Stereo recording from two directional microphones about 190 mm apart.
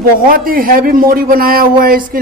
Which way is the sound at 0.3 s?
50° right (ahead or behind).